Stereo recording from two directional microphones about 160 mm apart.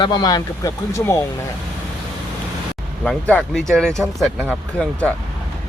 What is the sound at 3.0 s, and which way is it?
Speech, 10° left (ahead or behind).